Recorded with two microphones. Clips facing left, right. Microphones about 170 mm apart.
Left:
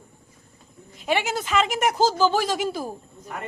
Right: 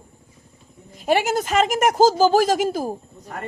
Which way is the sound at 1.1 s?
45° right (ahead or behind).